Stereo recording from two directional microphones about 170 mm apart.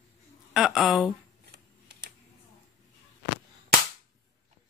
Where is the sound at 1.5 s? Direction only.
65° right (ahead or behind).